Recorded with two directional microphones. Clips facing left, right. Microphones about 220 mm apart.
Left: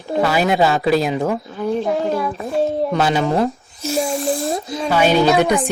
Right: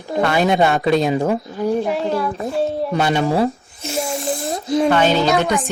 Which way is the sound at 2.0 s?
20° left (ahead or behind).